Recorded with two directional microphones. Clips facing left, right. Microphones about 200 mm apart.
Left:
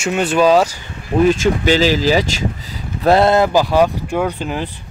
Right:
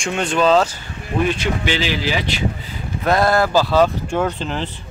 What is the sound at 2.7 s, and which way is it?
Speech, 30° left (ahead or behind).